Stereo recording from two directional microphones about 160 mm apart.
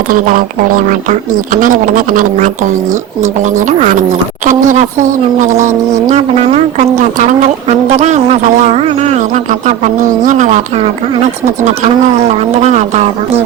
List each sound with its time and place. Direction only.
0.1 s speech: 60° right (ahead or behind)
3.6 s speech: 50° right (ahead or behind)
12.6 s speech: 45° right (ahead or behind)